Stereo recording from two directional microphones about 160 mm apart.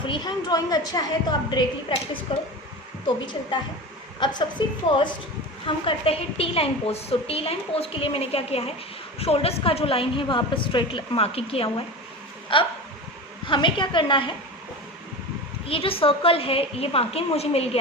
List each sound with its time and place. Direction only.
0.0 s a woman's voice: 30° left (ahead or behind)
4.2 s a woman's voice: 30° left (ahead or behind)
15.6 s a woman's voice: 35° left (ahead or behind)